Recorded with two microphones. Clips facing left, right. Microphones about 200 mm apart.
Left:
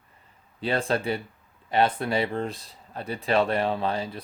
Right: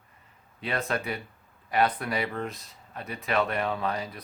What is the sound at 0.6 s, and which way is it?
Speech, 30° left (ahead or behind).